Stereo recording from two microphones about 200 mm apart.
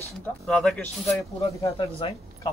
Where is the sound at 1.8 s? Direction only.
30° left (ahead or behind).